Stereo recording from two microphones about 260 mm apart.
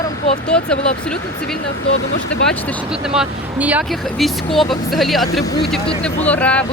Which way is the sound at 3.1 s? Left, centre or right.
Centre.